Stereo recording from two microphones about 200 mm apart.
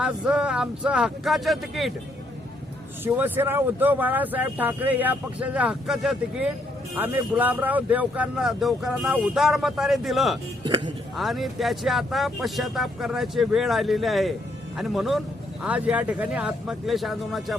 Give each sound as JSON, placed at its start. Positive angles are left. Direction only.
{"t": 0.0, "sound": "a man's voice", "side_deg": -5}
{"t": 3.0, "sound": "a man's voice", "side_deg": -10}
{"t": 10.6, "sound": "speech", "side_deg": -25}
{"t": 11.2, "sound": "a man's voice", "side_deg": 0}